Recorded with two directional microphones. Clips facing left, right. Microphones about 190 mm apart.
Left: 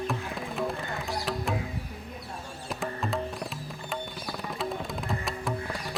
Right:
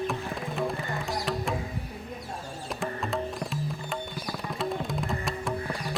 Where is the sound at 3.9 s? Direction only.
Centre (ahead or behind).